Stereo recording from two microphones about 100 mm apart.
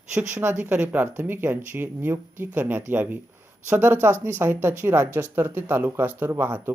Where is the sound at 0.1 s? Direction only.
10° right (ahead or behind).